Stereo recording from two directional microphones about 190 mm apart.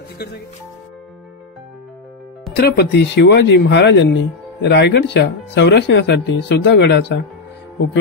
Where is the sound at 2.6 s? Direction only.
60° left (ahead or behind).